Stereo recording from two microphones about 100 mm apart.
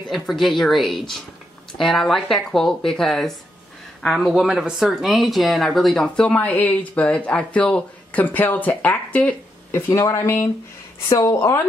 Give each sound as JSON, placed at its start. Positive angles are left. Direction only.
{"t": 0.1, "sound": "speech", "side_deg": 0}
{"t": 9.7, "sound": "a woman's voice", "side_deg": 25}